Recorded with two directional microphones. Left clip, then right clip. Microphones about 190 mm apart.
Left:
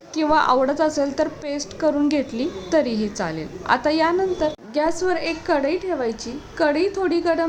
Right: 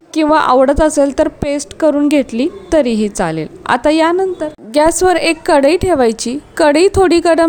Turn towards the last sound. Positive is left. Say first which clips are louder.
# right 11 dB
turn(degrees=-50)  # may be behind; listen again after turning